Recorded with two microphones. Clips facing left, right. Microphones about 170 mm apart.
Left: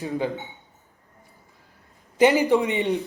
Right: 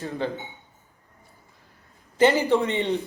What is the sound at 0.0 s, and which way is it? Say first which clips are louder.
Speech: left 2 dB; 15° left (ahead or behind).